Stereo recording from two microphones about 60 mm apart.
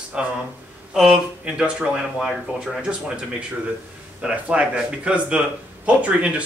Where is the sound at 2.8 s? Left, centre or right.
Centre.